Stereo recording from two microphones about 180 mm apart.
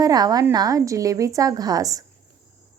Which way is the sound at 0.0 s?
20° right (ahead or behind).